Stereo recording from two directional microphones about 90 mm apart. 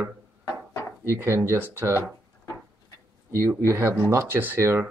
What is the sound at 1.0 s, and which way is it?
Speech, 30° right (ahead or behind).